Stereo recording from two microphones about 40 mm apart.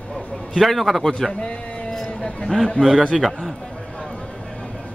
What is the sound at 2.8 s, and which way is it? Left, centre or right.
Speech, left.